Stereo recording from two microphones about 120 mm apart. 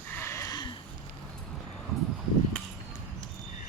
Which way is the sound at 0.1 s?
20° left (ahead or behind).